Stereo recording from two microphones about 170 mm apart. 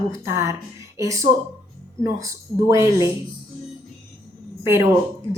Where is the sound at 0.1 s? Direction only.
20° right (ahead or behind).